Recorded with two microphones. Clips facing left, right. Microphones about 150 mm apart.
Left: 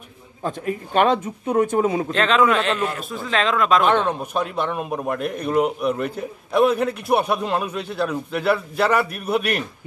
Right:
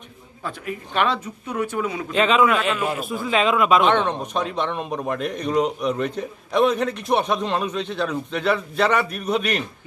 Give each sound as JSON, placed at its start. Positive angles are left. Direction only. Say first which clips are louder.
{"t": 0.7, "sound": "speech", "louder": "left 5 dB", "side_deg": 45}
{"t": 2.1, "sound": "a man's voice", "louder": "right 2 dB", "side_deg": -5}
{"t": 3.8, "sound": "a man's voice", "louder": "even", "side_deg": 5}